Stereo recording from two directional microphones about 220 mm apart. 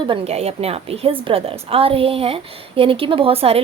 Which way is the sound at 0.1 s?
25° right (ahead or behind).